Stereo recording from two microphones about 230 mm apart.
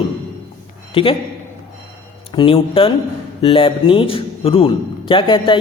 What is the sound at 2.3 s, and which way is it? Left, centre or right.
A man's voice, left.